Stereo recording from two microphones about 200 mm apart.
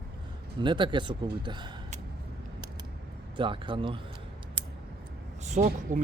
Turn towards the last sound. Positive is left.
turn(degrees=-35)  # may be behind; listen again after turning